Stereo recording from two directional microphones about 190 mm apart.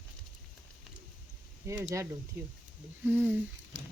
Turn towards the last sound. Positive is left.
turn(degrees=-10)  # may be behind; listen again after turning